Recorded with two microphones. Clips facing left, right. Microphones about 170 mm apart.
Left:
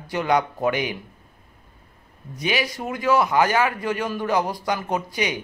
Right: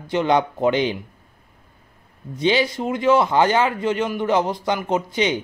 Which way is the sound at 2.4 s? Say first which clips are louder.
Right 6 dB; 25° right (ahead or behind).